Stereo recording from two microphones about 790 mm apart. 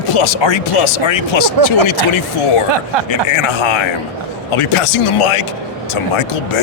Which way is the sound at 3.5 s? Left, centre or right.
Left.